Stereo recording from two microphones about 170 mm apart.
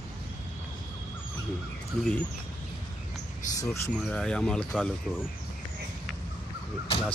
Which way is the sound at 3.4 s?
50° left (ahead or behind).